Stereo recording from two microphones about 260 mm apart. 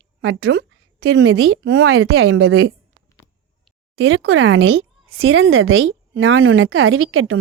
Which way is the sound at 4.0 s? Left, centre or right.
Right.